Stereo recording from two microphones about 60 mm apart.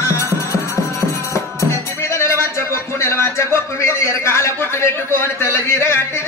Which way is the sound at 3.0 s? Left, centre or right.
Left.